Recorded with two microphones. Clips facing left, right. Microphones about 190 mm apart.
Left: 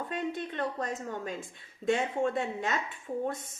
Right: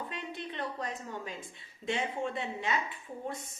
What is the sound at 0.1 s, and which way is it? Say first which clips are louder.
A woman's voice: left 6 dB; 50° left (ahead or behind).